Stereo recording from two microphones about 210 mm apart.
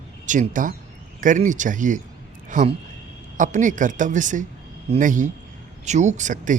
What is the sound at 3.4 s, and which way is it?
Speech, 40° right (ahead or behind).